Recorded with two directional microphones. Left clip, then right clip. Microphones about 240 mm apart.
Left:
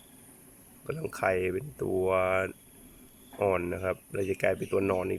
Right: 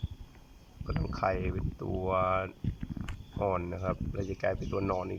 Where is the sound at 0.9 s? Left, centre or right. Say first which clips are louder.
Left 3 dB; centre.